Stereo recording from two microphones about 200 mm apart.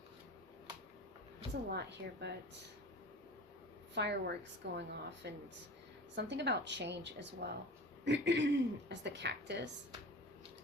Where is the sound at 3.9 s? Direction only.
60° right (ahead or behind).